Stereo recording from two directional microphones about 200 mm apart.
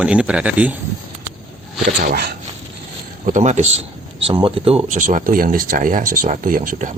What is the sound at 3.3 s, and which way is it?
A man's voice, 35° right (ahead or behind).